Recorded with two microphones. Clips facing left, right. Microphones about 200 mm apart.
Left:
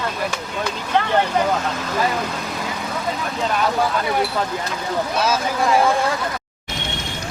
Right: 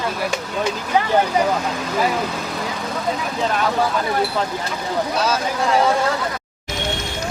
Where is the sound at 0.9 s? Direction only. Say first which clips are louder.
Right 1 dB; 5° right (ahead or behind).